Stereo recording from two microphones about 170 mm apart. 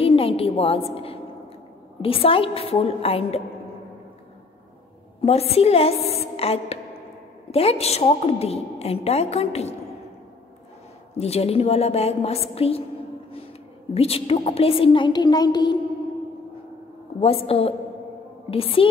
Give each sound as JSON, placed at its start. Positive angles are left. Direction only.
{"t": 0.0, "sound": "a sound", "side_deg": 35}
{"t": 2.0, "sound": "a woman's voice", "side_deg": 35}
{"t": 5.2, "sound": "a woman's voice", "side_deg": 35}
{"t": 11.1, "sound": "a woman's voice", "side_deg": 35}
{"t": 13.9, "sound": "a woman's voice", "side_deg": 35}
{"t": 17.2, "sound": "a woman's voice", "side_deg": 35}